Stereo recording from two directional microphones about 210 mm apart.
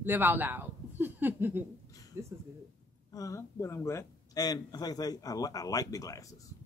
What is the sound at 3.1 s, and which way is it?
A man's voice, 15° left (ahead or behind).